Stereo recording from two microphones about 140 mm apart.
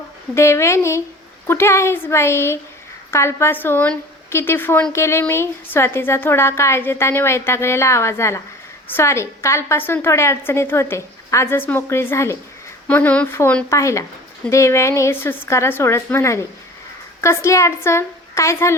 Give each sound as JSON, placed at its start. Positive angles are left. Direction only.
{"t": 0.3, "sound": "a woman's voice", "side_deg": 20}